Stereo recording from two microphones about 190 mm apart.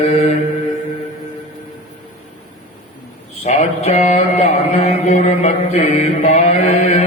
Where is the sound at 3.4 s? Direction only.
35° left (ahead or behind).